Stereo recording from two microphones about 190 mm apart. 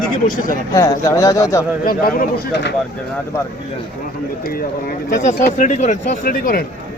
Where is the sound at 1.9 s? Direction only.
55° left (ahead or behind).